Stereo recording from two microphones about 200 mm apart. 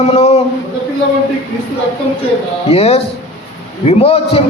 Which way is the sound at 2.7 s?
30° left (ahead or behind).